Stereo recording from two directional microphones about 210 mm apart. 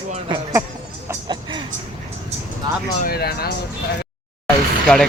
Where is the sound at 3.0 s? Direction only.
45° left (ahead or behind).